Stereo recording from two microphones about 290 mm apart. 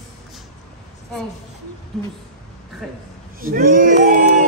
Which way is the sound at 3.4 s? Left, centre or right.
Right.